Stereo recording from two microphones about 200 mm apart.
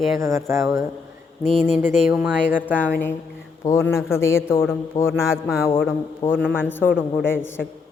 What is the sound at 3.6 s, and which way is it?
A man's voice, 15° left (ahead or behind).